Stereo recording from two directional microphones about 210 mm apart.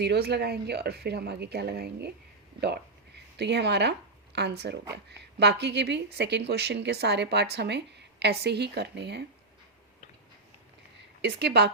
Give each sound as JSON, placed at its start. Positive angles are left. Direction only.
{"t": 0.0, "sound": "speech", "side_deg": -50}
{"t": 11.2, "sound": "speech", "side_deg": -55}